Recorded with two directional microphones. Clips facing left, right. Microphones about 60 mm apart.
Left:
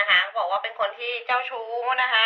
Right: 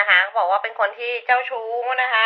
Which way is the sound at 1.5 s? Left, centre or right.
Right.